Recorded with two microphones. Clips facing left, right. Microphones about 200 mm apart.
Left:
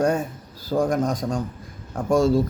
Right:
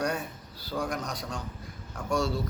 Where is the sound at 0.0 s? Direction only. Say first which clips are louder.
Left 9 dB; 50° left (ahead or behind).